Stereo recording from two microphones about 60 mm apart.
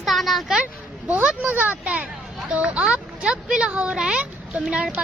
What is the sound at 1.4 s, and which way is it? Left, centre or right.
Speech, right.